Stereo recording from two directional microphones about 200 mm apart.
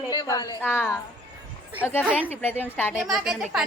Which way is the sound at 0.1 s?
20° left (ahead or behind).